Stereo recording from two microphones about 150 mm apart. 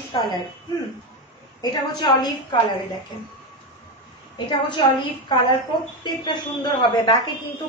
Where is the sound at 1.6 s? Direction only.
25° left (ahead or behind).